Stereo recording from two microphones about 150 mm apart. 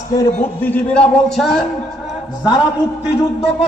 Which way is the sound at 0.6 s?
10° left (ahead or behind).